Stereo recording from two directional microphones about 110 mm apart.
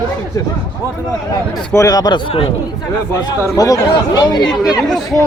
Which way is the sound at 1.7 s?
35° left (ahead or behind).